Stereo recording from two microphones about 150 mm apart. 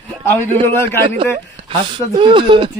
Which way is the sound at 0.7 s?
15° left (ahead or behind).